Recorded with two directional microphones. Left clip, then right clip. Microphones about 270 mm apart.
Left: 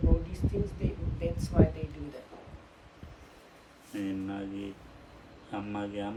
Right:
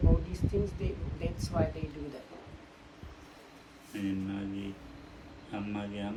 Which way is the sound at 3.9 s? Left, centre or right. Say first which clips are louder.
Left 1 dB; centre.